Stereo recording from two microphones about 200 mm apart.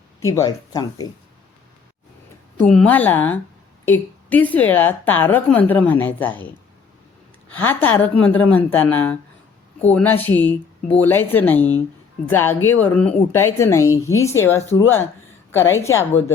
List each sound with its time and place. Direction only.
0.2 s speech: 15° left (ahead or behind)
2.6 s a woman's voice: 5° left (ahead or behind)
7.5 s a woman's voice: 10° left (ahead or behind)